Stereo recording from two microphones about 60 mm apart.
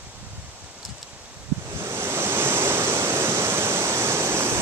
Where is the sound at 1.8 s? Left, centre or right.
Right.